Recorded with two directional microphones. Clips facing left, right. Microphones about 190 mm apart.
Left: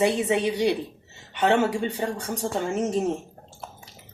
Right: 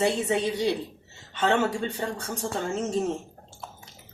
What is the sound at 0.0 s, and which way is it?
Speech, 15° left (ahead or behind).